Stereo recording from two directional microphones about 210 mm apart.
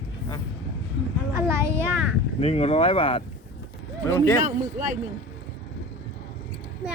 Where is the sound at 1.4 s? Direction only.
10° right (ahead or behind).